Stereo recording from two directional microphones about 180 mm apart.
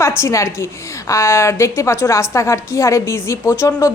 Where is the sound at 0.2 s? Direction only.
15° left (ahead or behind).